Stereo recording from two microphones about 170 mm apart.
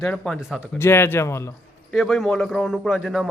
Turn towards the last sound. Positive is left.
turn(degrees=-5)  # may be behind; listen again after turning